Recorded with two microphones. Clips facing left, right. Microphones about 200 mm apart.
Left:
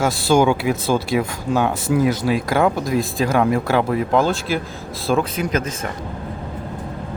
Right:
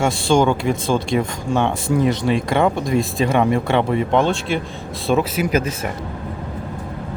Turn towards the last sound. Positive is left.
turn(degrees=-10)  # may be behind; listen again after turning